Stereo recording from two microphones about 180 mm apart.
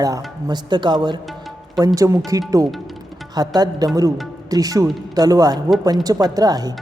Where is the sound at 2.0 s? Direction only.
20° right (ahead or behind).